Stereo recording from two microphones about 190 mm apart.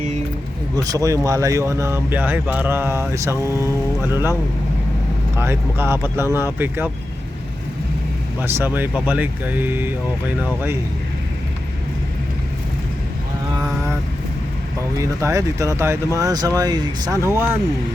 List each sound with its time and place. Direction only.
0.8 s speech: 20° right (ahead or behind)
5.4 s speech: 15° right (ahead or behind)
8.4 s speech: 10° right (ahead or behind)
14.9 s speech: 15° right (ahead or behind)